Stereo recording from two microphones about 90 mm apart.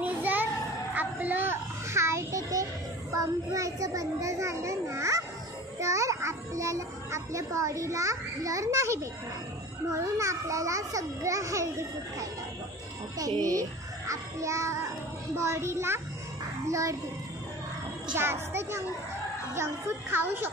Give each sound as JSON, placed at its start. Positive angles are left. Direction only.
{"t": 0.0, "sound": "children playing", "side_deg": -20}
{"t": 0.9, "sound": "a sound", "side_deg": -20}
{"t": 3.1, "sound": "a child's voice", "side_deg": -40}
{"t": 13.3, "sound": "a child's voice", "side_deg": -45}
{"t": 18.1, "sound": "speech", "side_deg": -30}